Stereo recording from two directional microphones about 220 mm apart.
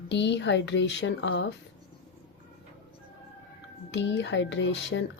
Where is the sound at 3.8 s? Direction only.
55° left (ahead or behind).